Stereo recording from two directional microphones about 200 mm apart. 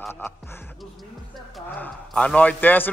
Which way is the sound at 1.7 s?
5° left (ahead or behind).